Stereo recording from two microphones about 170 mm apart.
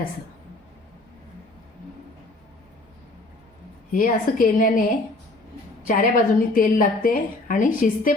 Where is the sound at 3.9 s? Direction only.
55° left (ahead or behind).